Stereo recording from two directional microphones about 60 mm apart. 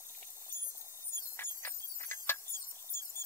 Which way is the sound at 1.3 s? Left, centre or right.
Left.